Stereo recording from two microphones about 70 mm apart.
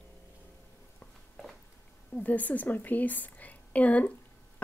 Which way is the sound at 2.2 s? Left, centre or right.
Left.